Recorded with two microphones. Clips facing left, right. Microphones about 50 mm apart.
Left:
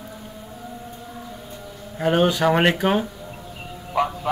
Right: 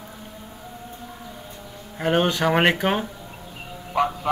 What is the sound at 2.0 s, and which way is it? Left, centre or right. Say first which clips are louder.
A man's voice: left 2 dB; centre.